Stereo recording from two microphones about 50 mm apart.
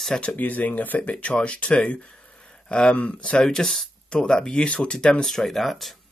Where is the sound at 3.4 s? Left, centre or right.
Centre.